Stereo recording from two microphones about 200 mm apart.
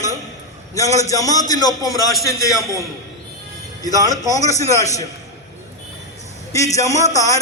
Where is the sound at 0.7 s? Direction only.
15° left (ahead or behind).